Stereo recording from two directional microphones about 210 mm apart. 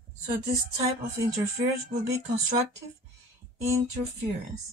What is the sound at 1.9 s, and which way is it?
Speech, 30° right (ahead or behind).